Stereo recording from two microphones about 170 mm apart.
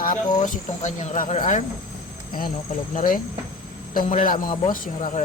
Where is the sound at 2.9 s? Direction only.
55° left (ahead or behind).